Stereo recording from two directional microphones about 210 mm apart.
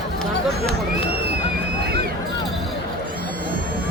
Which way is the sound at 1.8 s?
50° right (ahead or behind).